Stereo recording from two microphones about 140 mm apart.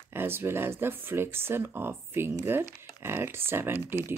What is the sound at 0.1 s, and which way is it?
Speech, 15° right (ahead or behind).